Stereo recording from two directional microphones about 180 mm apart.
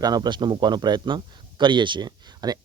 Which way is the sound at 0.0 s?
20° right (ahead or behind).